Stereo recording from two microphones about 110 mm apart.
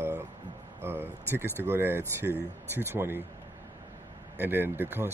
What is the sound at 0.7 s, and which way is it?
Speech, 20° right (ahead or behind).